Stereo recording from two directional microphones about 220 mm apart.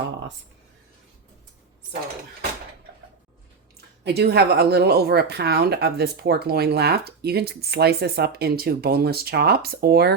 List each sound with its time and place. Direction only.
3.8 s a woman's voice: 45° right (ahead or behind)